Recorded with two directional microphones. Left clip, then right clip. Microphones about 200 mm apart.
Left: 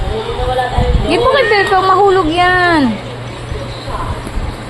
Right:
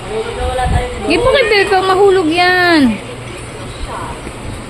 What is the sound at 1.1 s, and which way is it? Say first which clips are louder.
A woman's voice: even; 20° right (ahead or behind).